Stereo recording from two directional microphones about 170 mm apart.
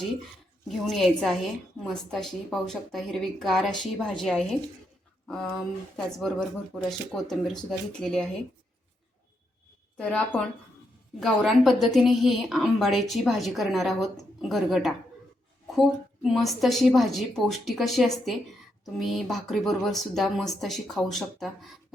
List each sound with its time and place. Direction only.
0.7 s a woman's voice: centre (ahead or behind)
6.1 s a woman's voice: centre (ahead or behind)
10.0 s a woman's voice: 5° left (ahead or behind)